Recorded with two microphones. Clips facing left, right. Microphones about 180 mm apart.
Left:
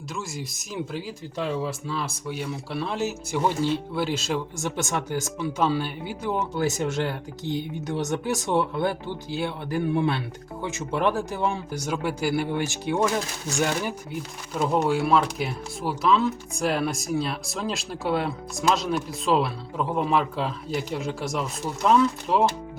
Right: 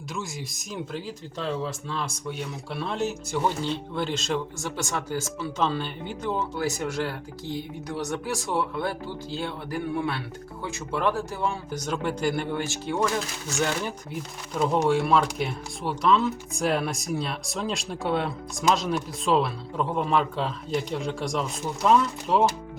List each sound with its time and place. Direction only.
0.1 s speech: centre (ahead or behind)
4.6 s speech: 20° left (ahead or behind)
6.6 s speech: 25° left (ahead or behind)
14.1 s speech: 5° left (ahead or behind)